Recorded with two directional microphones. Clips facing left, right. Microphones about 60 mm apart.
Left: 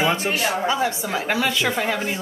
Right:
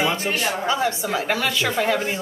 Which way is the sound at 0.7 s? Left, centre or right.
Centre.